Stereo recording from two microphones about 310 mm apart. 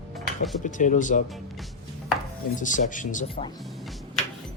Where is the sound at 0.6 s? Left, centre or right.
Left.